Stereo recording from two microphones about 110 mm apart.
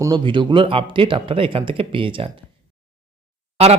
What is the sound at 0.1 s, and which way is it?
Speech, 45° right (ahead or behind).